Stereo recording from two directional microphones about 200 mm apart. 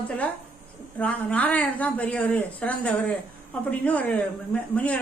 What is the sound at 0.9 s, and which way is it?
A woman's voice, 5° left (ahead or behind).